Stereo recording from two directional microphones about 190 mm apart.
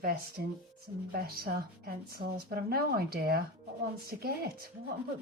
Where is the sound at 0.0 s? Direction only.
55° right (ahead or behind).